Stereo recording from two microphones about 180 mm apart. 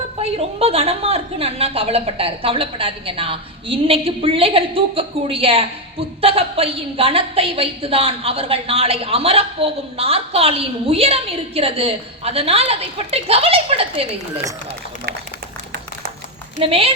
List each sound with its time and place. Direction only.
0.2 s a woman's voice: 35° right (ahead or behind)
16.6 s a woman's voice: 30° right (ahead or behind)